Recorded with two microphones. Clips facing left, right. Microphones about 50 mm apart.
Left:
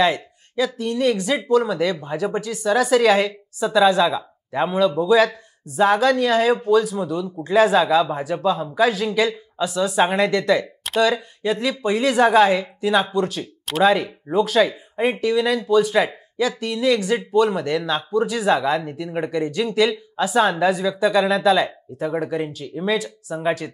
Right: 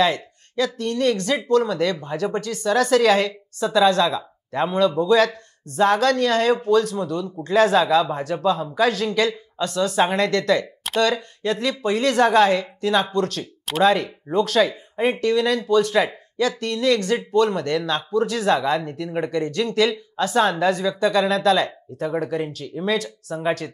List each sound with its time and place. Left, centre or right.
0.0 s speech: centre